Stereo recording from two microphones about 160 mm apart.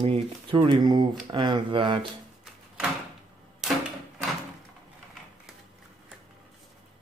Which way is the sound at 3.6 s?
5° right (ahead or behind).